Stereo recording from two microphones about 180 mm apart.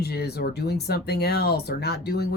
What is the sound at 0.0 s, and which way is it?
Speech, 65° left (ahead or behind).